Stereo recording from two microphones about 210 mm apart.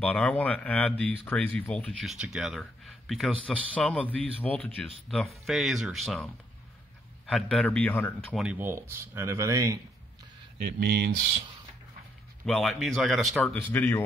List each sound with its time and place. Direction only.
0.0 s speech: 5° left (ahead or behind)
8.4 s speech: 5° right (ahead or behind)
10.8 s speech: 50° right (ahead or behind)
12.4 s speech: centre (ahead or behind)